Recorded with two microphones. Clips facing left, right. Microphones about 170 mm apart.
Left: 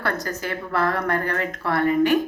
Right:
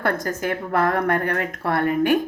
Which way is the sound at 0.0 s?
50° right (ahead or behind).